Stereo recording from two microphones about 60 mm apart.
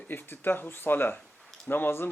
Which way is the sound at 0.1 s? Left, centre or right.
Left.